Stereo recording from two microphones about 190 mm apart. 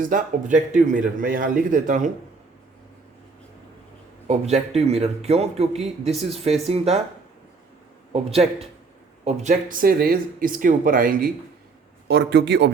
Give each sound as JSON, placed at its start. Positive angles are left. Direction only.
{"t": 0.0, "sound": "a man's voice", "side_deg": -45}
{"t": 4.3, "sound": "a man's voice", "side_deg": -35}
{"t": 8.1, "sound": "a man's voice", "side_deg": -30}
{"t": 12.0, "sound": "a man's voice", "side_deg": -60}